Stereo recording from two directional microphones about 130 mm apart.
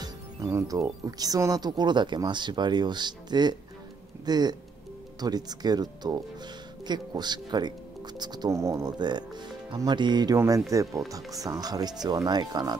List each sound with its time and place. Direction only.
0.0 s speech: 25° right (ahead or behind)